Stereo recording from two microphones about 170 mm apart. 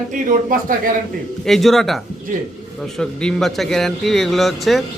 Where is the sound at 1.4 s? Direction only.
Centre (ahead or behind).